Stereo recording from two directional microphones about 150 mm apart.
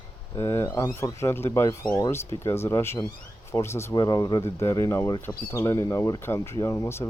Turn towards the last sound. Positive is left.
turn(degrees=20)  # may be behind; listen again after turning